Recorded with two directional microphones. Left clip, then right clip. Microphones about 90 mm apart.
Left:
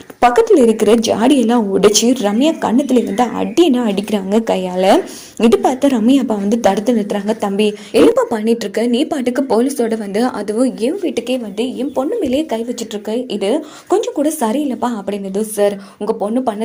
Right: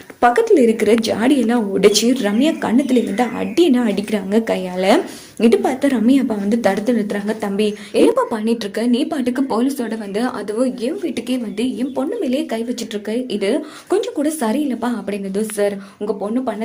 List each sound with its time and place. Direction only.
0.3 s a woman's voice: 45° left (ahead or behind)
1.8 s speech: 45° left (ahead or behind)
5.4 s a woman's voice: 60° left (ahead or behind)
8.4 s speech: 35° left (ahead or behind); by 13.6 s 20° left (ahead or behind)
13.9 s speech: 35° left (ahead or behind)
15.6 s speech: 65° left (ahead or behind)